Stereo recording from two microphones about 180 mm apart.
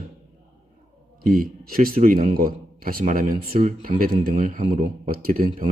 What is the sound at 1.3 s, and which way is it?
Speech, 50° right (ahead or behind).